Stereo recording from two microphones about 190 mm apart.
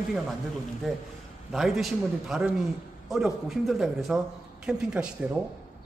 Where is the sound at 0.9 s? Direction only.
Centre (ahead or behind).